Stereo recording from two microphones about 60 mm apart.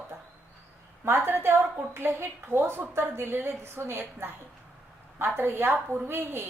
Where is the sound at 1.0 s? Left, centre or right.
Right.